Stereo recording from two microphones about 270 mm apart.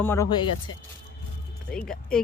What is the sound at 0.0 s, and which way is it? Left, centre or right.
Speech, centre.